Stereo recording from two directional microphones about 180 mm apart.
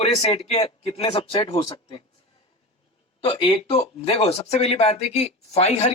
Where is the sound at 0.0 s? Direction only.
35° left (ahead or behind).